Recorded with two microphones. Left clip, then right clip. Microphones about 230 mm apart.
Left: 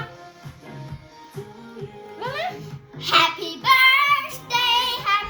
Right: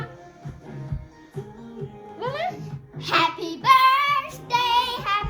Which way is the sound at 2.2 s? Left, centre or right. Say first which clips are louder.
Even; left.